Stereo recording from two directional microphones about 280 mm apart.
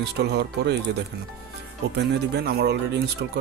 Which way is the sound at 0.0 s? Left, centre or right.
Right.